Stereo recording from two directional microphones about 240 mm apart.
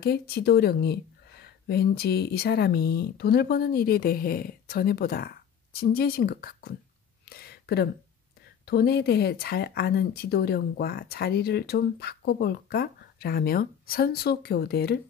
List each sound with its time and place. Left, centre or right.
0.0 s speech: left
7.2 s a sound: left
8.6 s speech: left